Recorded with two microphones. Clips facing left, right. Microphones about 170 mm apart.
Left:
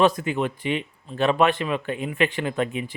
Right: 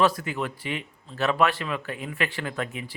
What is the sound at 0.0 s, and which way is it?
Speech, 20° left (ahead or behind).